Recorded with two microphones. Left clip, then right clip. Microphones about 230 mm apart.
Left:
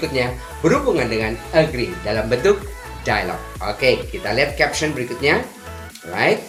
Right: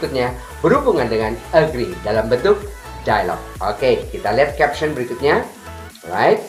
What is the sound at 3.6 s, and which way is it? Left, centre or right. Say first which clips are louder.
Speech: right 1 dB; left.